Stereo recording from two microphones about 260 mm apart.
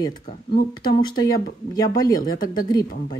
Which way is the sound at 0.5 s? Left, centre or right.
Left.